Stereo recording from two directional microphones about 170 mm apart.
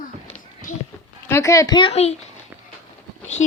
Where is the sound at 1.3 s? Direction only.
15° left (ahead or behind); by 2.1 s 35° left (ahead or behind).